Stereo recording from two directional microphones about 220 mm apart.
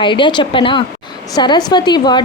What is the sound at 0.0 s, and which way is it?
A woman's voice, 20° left (ahead or behind).